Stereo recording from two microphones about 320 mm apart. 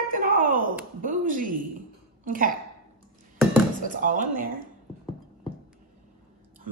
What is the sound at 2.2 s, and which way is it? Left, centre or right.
Speech, right.